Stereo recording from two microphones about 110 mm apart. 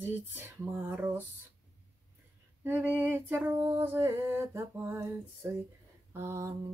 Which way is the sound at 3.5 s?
20° right (ahead or behind).